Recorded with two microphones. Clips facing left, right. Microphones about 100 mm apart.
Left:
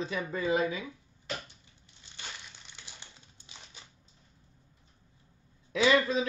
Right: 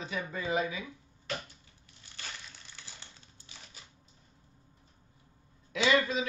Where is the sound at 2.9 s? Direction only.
20° left (ahead or behind).